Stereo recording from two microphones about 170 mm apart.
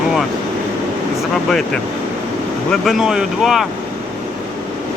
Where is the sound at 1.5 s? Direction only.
Centre (ahead or behind).